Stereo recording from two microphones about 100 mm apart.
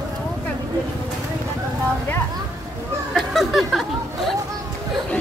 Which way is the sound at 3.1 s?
Centre (ahead or behind).